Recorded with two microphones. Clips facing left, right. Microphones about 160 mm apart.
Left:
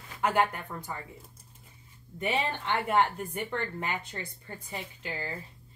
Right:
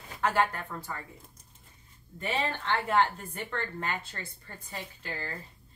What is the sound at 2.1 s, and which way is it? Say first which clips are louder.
A woman's voice: left 2 dB; 15° left (ahead or behind).